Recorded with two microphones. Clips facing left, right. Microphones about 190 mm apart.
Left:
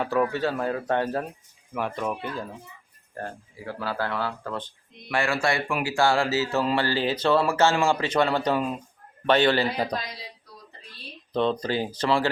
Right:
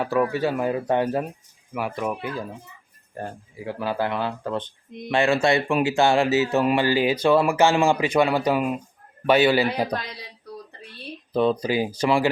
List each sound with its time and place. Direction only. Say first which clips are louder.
0.0 s speech: right 2 dB; 5° right (ahead or behind)
11.3 s speech: right 3 dB; 10° right (ahead or behind)